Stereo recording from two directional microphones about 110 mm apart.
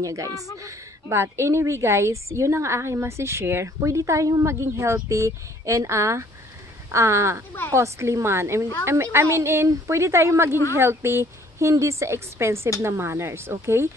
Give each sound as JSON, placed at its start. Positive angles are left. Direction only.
{"t": 0.0, "sound": "a woman's voice", "side_deg": -30}